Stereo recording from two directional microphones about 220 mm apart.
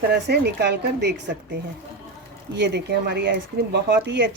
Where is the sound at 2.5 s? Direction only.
50° right (ahead or behind).